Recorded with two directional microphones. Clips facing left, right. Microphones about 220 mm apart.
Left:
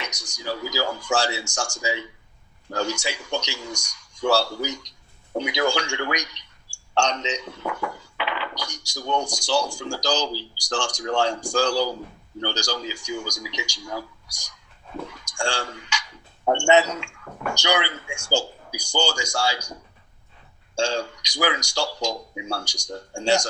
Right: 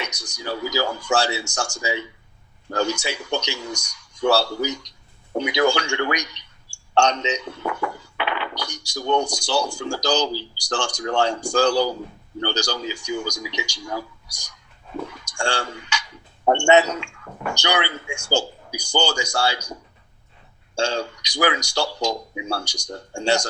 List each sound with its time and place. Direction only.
0.1 s speech: 60° right (ahead or behind)
20.7 s speech: 60° right (ahead or behind)